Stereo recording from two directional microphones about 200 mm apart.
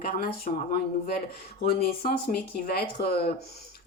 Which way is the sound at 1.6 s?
50° left (ahead or behind).